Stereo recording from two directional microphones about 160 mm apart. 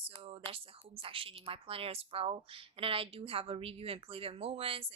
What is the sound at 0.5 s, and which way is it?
A woman's voice, 35° right (ahead or behind).